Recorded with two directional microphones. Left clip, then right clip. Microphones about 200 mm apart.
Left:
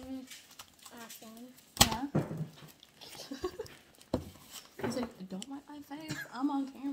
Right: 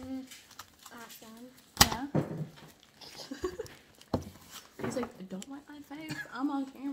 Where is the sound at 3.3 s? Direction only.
20° left (ahead or behind).